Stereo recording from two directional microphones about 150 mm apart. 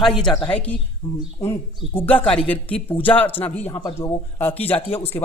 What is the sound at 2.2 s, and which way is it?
Speech, 10° left (ahead or behind).